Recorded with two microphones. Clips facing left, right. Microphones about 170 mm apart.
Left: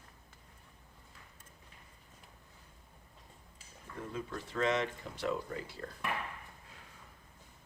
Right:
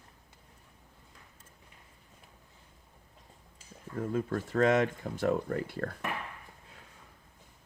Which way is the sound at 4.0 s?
50° right (ahead or behind).